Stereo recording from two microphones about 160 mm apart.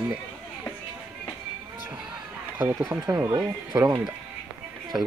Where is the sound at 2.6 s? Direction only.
20° right (ahead or behind).